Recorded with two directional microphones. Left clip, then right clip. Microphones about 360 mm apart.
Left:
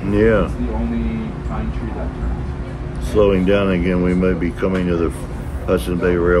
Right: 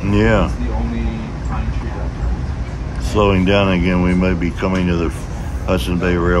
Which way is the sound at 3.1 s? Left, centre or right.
Centre.